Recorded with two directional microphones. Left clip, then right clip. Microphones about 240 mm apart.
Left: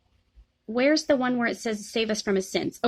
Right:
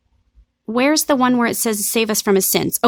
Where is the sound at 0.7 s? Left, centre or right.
Right.